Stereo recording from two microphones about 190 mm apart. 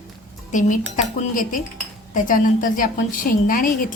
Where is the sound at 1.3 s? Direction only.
45° left (ahead or behind).